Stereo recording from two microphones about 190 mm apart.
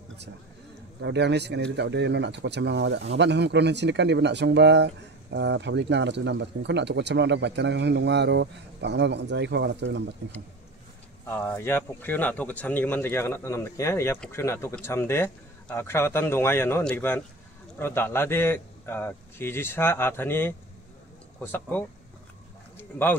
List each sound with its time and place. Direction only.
1.0 s speech: 65° right (ahead or behind)
11.2 s speech: 10° left (ahead or behind)
22.8 s a sound: 10° left (ahead or behind)